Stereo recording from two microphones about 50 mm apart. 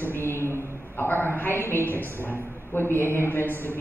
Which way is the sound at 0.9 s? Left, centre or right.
Left.